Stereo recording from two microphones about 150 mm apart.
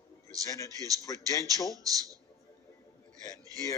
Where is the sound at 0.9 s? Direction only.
25° right (ahead or behind).